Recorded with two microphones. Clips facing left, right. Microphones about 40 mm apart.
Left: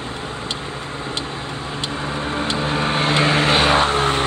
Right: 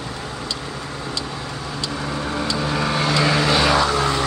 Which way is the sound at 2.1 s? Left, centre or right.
Left.